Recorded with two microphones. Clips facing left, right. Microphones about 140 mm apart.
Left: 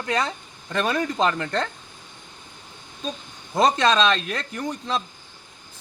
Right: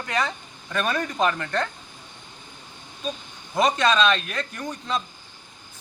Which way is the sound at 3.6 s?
40° left (ahead or behind).